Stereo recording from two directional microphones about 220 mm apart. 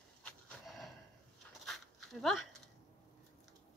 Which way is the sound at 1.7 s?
Centre (ahead or behind).